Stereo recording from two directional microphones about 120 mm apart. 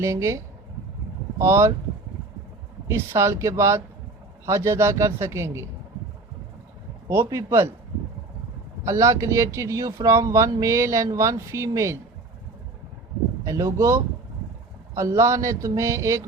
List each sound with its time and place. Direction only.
0.0 s speech: 25° right (ahead or behind)
2.8 s speech: 25° right (ahead or behind)
7.1 s speech: 20° right (ahead or behind)
8.8 s speech: 25° right (ahead or behind)
13.4 s speech: 25° right (ahead or behind)